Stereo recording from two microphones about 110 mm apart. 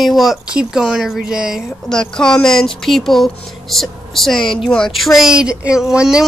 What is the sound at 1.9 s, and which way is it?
A woman's voice, 5° left (ahead or behind).